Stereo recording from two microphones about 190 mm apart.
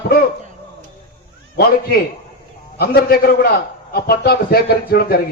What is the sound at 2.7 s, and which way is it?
A man's voice, 55° left (ahead or behind).